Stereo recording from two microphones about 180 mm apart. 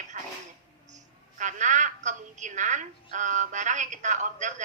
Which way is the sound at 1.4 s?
45° right (ahead or behind).